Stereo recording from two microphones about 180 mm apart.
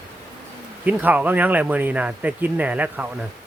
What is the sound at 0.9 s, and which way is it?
Speech, 10° right (ahead or behind).